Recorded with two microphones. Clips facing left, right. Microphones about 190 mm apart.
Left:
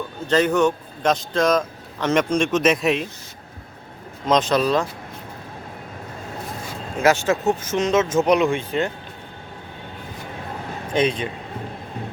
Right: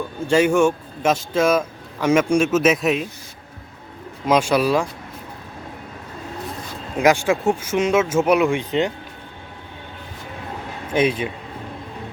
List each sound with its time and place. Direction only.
0.3 s speech: 10° right (ahead or behind)
4.3 s speech: 10° right (ahead or behind)
7.0 s speech: 15° right (ahead or behind)
10.9 s speech: 5° right (ahead or behind)